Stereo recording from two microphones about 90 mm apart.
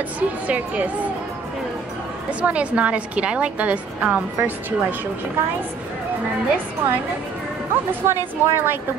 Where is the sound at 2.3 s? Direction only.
15° right (ahead or behind).